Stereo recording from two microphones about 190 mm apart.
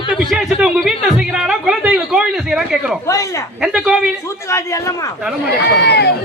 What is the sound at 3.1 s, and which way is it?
Speech, 15° left (ahead or behind).